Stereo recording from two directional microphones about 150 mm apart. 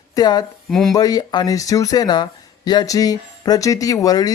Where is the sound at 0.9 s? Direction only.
25° left (ahead or behind).